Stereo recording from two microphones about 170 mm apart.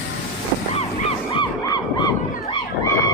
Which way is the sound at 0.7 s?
35° left (ahead or behind).